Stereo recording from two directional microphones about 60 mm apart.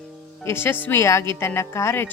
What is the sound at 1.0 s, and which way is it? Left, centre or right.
A woman's voice, left.